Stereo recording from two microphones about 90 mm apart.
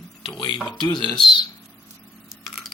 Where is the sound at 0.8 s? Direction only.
55° left (ahead or behind).